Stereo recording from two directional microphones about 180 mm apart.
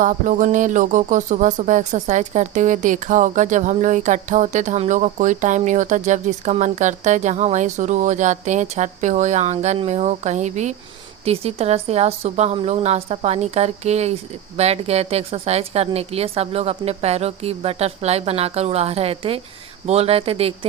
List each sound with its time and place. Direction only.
0.0 s a woman's voice: 45° right (ahead or behind)